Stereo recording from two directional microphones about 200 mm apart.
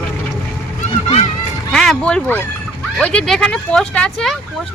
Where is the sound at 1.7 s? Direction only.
5° left (ahead or behind).